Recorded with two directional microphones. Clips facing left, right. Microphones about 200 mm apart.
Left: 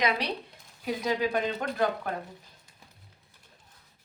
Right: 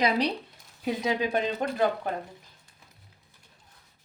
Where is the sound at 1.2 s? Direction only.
20° right (ahead or behind).